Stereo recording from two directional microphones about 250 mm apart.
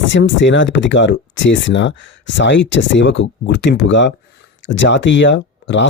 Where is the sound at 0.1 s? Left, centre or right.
Left.